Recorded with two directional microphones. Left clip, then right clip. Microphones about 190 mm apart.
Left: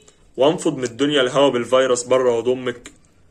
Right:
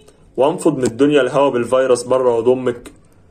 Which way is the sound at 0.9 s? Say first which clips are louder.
Right 2 dB; 20° left (ahead or behind).